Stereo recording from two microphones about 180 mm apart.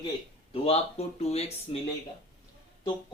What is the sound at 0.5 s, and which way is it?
Speech, 35° left (ahead or behind).